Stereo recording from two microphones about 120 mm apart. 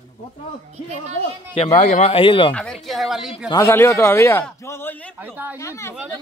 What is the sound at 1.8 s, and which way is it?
Speech, 70° left (ahead or behind).